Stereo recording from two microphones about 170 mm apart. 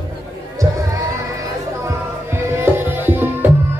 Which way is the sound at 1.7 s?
15° right (ahead or behind).